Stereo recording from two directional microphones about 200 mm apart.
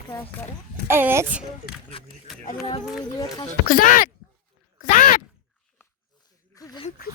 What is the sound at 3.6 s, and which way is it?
Speech, 45° left (ahead or behind).